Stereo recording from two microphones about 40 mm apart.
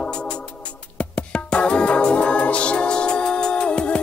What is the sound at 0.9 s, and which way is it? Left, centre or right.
Music, left.